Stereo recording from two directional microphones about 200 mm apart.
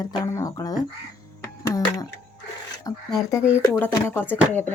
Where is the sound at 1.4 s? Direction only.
15° left (ahead or behind).